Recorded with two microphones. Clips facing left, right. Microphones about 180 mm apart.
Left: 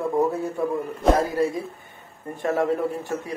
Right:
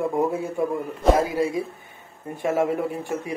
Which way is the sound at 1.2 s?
20° right (ahead or behind).